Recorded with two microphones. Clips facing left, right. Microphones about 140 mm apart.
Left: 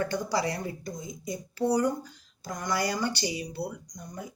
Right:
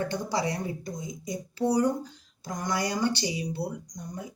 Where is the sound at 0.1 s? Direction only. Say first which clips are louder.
Even; 20° right (ahead or behind).